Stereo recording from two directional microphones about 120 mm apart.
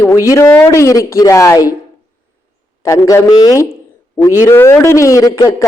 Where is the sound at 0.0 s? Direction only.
25° left (ahead or behind).